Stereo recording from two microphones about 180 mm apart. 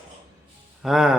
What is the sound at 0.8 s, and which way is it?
Music, centre (ahead or behind).